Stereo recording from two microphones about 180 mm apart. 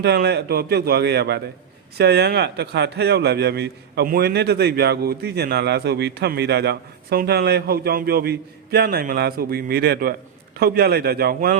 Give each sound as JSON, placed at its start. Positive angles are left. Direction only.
{"t": 0.0, "sound": "speech", "side_deg": -65}